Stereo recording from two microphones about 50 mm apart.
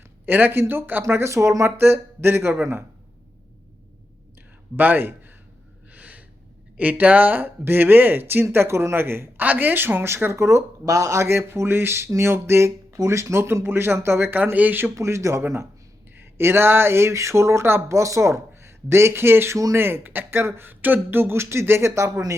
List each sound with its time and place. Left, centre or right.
0.3 s speech: right
1.1 s speech: right
1.8 s speech: right
4.8 s speech: right
5.9 s gasp: right
6.7 s speech: right
8.5 s speech: right
9.4 s speech: right
10.3 s speech: right
12.0 s speech: right
14.5 s speech: right
14.9 s speech: right
16.1 s speech: right
17.8 s speech: right